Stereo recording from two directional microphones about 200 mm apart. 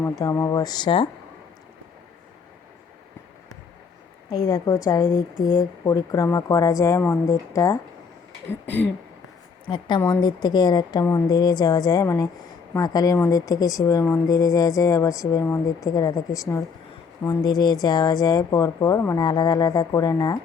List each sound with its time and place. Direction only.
0.0 s speech: 15° left (ahead or behind)
4.3 s a woman's voice: 15° left (ahead or behind)
9.6 s a woman's voice: 25° left (ahead or behind)